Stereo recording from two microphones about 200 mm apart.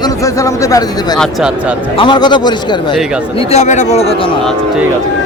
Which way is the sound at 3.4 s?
30° left (ahead or behind).